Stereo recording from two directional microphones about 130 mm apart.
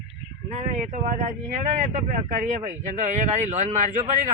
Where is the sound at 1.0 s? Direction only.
75° right (ahead or behind).